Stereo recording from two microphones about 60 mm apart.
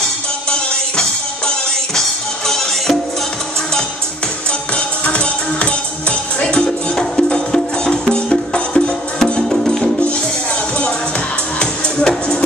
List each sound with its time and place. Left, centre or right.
2.0 s music: centre
4.5 s music: centre
11.6 s music: centre